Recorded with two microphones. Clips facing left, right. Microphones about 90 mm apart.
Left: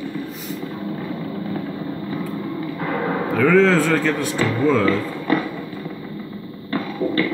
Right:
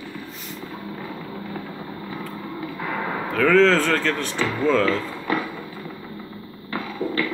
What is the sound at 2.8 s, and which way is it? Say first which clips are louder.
Artillery fire: left 5 dB; 45° left (ahead or behind).